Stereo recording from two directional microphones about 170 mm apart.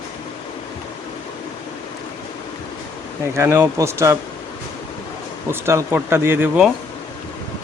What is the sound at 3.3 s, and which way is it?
Speech, 15° right (ahead or behind).